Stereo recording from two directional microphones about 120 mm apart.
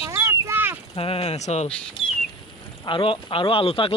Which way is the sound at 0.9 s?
50° left (ahead or behind).